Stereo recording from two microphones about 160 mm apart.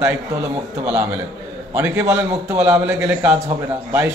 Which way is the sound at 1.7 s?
15° right (ahead or behind).